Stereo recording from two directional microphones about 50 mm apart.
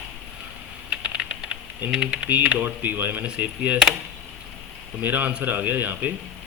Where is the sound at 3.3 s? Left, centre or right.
Right.